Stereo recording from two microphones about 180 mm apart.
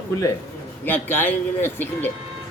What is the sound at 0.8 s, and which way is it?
Speech, 10° left (ahead or behind).